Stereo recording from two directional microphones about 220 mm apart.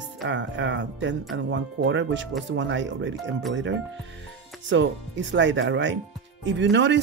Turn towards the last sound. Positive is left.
turn(degrees=-55)  # may be behind; listen again after turning